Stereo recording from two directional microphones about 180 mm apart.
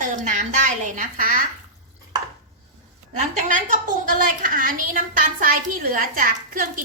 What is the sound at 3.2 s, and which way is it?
A woman's voice, 45° right (ahead or behind).